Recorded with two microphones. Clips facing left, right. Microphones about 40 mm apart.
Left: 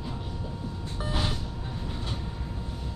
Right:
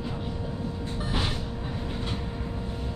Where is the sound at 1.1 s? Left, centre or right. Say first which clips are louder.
Even; centre.